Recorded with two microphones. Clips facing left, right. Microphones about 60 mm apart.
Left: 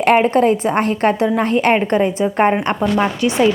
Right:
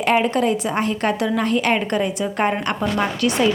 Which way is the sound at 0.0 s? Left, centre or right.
Left.